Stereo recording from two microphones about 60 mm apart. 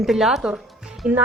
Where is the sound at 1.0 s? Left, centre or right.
Right.